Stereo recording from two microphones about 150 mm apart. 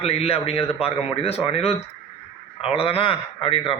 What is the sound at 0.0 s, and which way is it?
A man's voice, 40° left (ahead or behind).